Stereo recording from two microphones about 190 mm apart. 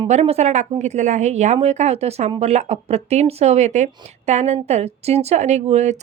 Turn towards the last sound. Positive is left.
turn(degrees=-35)  # may be behind; listen again after turning